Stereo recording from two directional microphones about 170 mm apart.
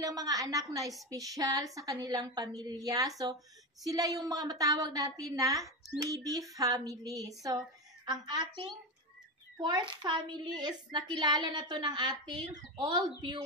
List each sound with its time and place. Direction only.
0.0 s a woman's voice: 20° right (ahead or behind)